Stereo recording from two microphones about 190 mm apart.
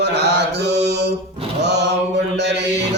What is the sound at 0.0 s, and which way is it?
Mantra, 60° right (ahead or behind).